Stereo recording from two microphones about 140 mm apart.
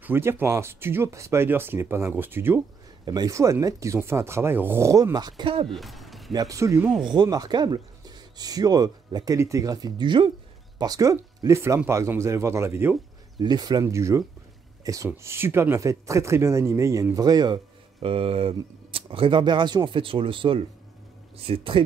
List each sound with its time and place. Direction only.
0.0 s speech: 15° right (ahead or behind); by 5.7 s 40° right (ahead or behind)
5.7 s a sound: centre (ahead or behind)
6.3 s speech: 25° right (ahead or behind)
13.4 s speech: 30° right (ahead or behind)
18.0 s speech: 45° right (ahead or behind)